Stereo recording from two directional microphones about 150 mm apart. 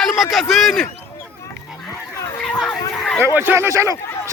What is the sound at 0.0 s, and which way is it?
Speech, centre (ahead or behind).